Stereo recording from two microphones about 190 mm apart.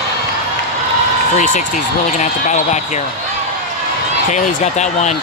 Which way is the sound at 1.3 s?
45° left (ahead or behind).